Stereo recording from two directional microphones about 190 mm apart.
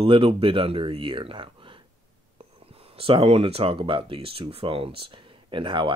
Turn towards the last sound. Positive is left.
turn(degrees=-25)  # may be behind; listen again after turning